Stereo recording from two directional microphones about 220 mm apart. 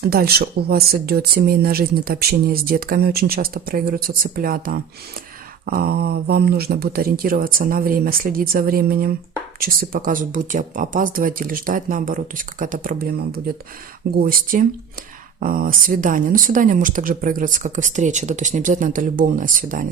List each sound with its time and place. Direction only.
0.0 s speech: 45° right (ahead or behind)